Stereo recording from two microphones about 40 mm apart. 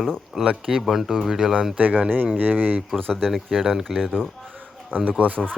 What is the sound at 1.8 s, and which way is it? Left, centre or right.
Speech, right.